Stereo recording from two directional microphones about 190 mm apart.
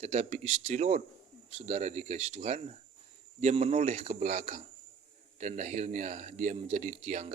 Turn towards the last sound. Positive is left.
turn(degrees=-40)  # may be behind; listen again after turning